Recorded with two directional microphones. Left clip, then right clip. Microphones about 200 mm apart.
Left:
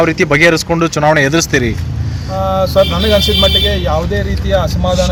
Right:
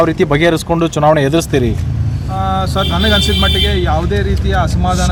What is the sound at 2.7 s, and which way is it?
Speech, 25° right (ahead or behind).